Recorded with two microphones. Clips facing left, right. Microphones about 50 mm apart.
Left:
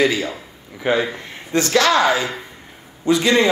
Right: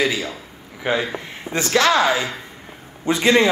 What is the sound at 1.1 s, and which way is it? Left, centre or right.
Speech, right.